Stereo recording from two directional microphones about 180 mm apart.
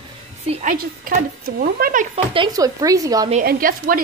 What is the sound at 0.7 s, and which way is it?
Speech, 55° right (ahead or behind).